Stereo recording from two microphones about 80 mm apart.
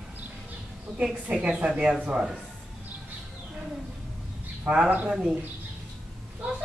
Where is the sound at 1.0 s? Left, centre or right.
Centre.